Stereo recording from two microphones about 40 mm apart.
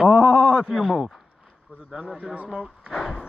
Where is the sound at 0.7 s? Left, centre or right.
Centre.